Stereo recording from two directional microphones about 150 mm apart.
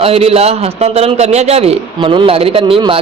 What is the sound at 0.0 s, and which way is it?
A man's voice, 40° right (ahead or behind).